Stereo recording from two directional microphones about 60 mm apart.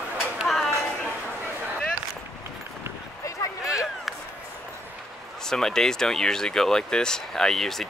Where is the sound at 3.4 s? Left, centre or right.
Left.